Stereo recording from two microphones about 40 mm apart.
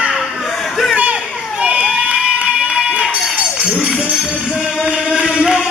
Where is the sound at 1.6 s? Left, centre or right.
Right.